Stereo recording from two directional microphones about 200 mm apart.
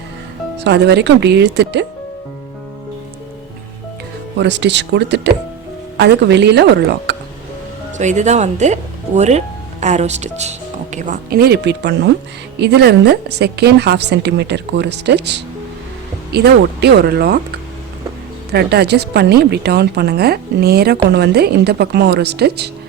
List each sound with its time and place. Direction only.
0.6 s a woman's voice: 55° right (ahead or behind)
4.4 s a woman's voice: 60° right (ahead or behind)
7.9 s a woman's voice: 35° right (ahead or behind); by 17.4 s 50° right (ahead or behind)
18.5 s a woman's voice: 55° right (ahead or behind)